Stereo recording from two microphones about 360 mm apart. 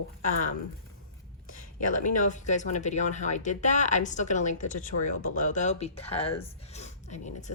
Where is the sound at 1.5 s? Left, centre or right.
Left.